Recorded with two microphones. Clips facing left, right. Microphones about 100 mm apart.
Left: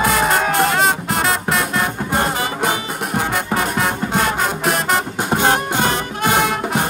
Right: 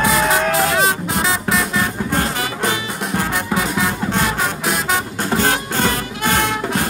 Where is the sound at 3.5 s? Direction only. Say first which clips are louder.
Even; centre (ahead or behind).